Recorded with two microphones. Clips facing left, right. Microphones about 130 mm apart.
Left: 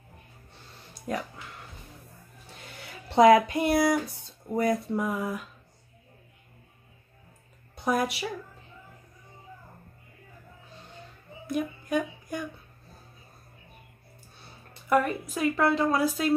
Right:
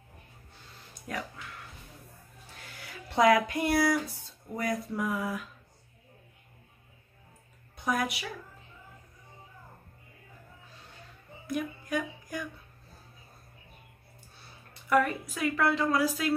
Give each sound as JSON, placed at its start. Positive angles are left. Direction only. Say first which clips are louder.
{"t": 1.0, "sound": "speech", "louder": "left 5 dB", "side_deg": 30}
{"t": 2.6, "sound": "a sound", "louder": "left 1 dB", "side_deg": 25}
{"t": 4.5, "sound": "a woman's voice", "louder": "left 6 dB", "side_deg": 30}
{"t": 7.7, "sound": "a woman's voice", "louder": "left 4 dB", "side_deg": 30}
{"t": 11.5, "sound": "speech", "louder": "left 4 dB", "side_deg": 25}
{"t": 14.9, "sound": "a woman's voice", "louder": "left 2 dB", "side_deg": 25}